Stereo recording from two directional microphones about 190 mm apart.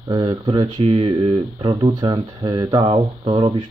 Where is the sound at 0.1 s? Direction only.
25° right (ahead or behind).